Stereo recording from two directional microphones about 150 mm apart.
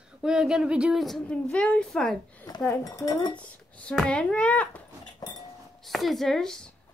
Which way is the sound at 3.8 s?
5° left (ahead or behind).